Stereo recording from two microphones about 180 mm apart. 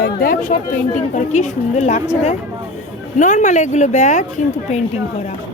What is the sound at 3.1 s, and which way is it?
Speech, 40° left (ahead or behind).